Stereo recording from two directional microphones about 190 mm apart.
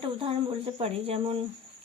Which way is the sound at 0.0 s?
30° right (ahead or behind).